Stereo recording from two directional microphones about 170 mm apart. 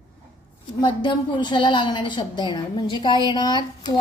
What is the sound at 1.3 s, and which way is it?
A woman's voice, 25° left (ahead or behind).